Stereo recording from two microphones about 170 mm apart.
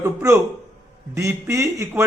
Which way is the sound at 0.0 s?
15° right (ahead or behind).